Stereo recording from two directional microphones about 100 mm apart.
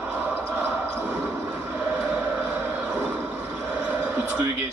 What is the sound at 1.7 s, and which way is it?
Music, 15° right (ahead or behind).